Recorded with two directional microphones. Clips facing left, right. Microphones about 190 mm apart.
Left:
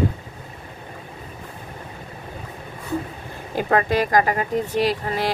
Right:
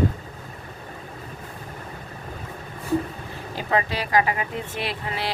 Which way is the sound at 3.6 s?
50° left (ahead or behind).